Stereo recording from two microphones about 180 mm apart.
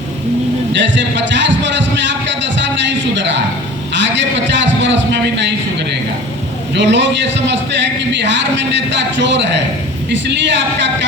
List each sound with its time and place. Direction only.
0.7 s a man's voice: 85° right
3.2 s a man's voice: 85° right
6.7 s a man's voice: 80° right